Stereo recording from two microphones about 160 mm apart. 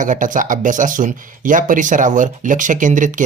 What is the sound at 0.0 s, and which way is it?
Speech, 55° right (ahead or behind).